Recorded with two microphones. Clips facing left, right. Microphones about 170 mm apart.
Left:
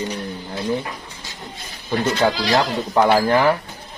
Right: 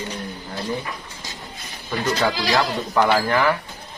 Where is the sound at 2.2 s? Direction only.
20° left (ahead or behind).